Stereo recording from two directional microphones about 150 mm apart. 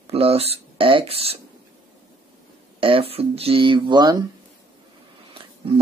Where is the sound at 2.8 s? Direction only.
35° right (ahead or behind).